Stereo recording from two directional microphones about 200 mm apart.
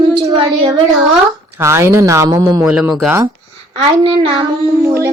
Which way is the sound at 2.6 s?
5° right (ahead or behind).